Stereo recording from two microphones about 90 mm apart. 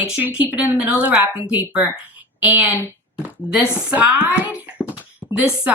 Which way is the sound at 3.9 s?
15° right (ahead or behind).